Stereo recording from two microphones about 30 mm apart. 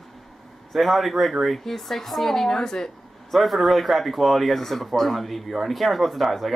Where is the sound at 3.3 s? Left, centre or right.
Centre.